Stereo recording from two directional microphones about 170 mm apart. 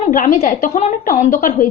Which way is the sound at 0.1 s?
55° left (ahead or behind).